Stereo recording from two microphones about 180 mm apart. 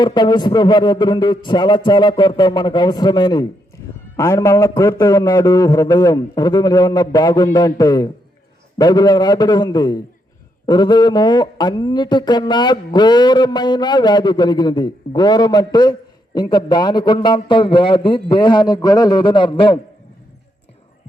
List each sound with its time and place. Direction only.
0.0 s speech: 25° left (ahead or behind)